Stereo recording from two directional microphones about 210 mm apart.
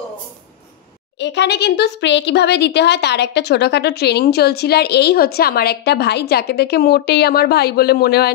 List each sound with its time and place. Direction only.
1.2 s a woman's voice: 55° left (ahead or behind)